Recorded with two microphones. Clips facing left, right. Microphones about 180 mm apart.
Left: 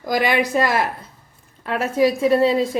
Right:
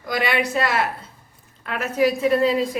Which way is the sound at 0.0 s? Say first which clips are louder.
Left 3 dB; 40° left (ahead or behind).